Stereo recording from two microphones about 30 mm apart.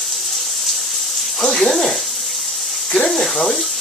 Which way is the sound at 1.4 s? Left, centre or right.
Centre.